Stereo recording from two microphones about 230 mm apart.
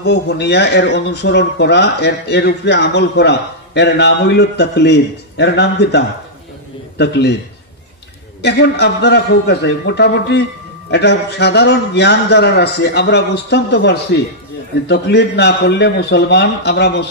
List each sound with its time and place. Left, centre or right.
0.0 s speech: left
8.4 s speech: left